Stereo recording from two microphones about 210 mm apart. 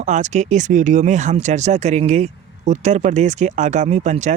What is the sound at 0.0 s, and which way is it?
Speech, 35° right (ahead or behind).